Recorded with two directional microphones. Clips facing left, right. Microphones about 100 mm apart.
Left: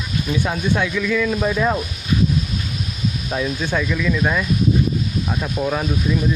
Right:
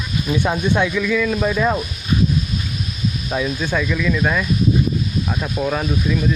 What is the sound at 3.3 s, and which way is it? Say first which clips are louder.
Speech: right 1 dB; centre (ahead or behind).